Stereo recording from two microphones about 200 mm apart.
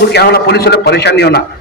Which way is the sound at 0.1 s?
55° left (ahead or behind).